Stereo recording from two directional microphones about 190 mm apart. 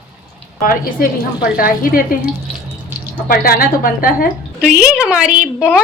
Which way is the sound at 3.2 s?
50° left (ahead or behind).